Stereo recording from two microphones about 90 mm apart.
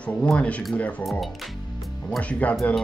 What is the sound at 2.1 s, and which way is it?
Speech, 15° left (ahead or behind).